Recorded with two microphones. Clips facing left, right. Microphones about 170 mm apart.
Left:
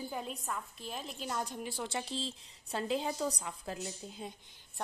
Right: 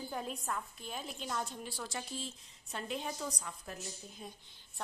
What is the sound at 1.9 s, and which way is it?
A woman's voice, 30° left (ahead or behind).